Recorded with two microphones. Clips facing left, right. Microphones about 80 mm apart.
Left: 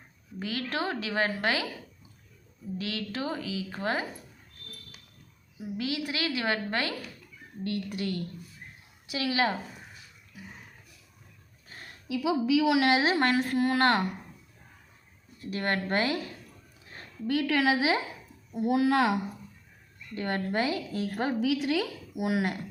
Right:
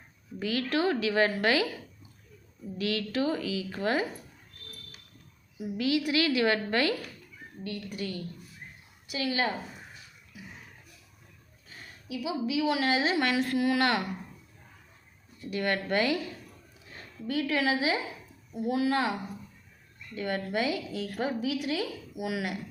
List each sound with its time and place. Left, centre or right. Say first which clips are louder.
0.3 s a woman's voice: right 3 dB; left
2.7 s a woman's voice: right 4 dB; left
5.7 s a woman's voice: right 5 dB; left
7.6 s speech: left 4 dB; left
9.1 s a woman's voice: left 2 dB; left
12.0 s a woman's voice: left 5 dB; left
13.1 s speech: left 2 dB; left
15.5 s speech: even; left
17.3 s a woman's voice: left 2 dB; left
18.5 s speech: left 3 dB; left
20.1 s speech: left 1 dB; left
21.4 s a woman's voice: left 3 dB; left
22.2 s speech: left 4 dB; left